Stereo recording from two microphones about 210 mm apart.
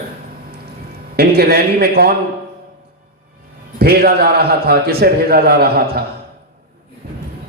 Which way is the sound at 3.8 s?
45° right (ahead or behind).